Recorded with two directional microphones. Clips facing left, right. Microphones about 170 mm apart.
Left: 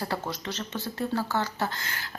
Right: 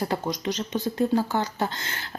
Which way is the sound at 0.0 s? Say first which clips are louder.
Right 5 dB; 15° right (ahead or behind).